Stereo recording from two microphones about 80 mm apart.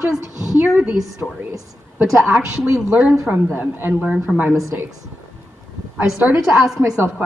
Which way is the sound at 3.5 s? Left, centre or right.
Right.